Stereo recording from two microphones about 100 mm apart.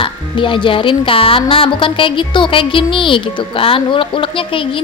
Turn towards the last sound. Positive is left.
turn(degrees=60)  # may be behind; listen again after turning